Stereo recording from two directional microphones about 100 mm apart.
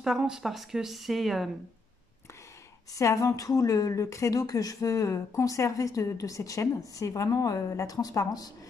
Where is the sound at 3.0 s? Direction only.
30° left (ahead or behind).